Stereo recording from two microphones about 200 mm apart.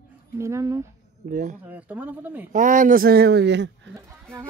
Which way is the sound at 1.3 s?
40° right (ahead or behind).